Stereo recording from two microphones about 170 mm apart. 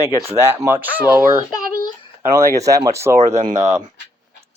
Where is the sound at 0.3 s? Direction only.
15° right (ahead or behind).